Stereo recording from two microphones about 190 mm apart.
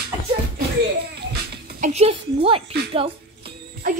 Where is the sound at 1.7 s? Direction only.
40° right (ahead or behind).